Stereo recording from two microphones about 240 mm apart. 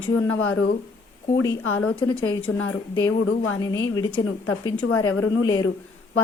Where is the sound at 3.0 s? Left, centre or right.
Left.